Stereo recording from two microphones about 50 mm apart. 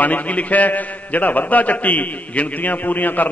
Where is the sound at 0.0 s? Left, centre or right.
Left.